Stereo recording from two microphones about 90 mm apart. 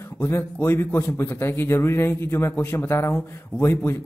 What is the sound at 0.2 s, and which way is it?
A man's voice, 25° left (ahead or behind).